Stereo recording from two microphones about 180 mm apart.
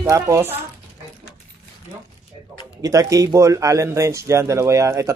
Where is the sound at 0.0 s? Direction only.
15° right (ahead or behind).